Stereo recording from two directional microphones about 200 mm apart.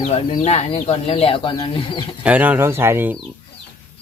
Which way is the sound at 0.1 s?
30° left (ahead or behind).